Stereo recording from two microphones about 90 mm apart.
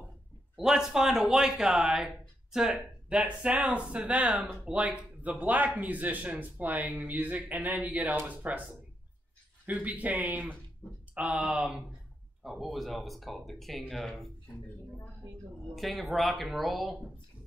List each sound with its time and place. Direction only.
0.6 s speech: 5° right (ahead or behind)
9.7 s speech: 15° right (ahead or behind); by 14.3 s centre (ahead or behind)
15.7 s speech: centre (ahead or behind)